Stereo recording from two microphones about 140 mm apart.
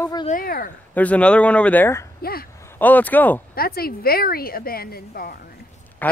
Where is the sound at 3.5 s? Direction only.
90° left.